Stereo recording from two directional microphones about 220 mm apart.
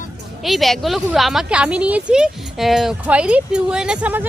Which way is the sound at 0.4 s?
Centre (ahead or behind).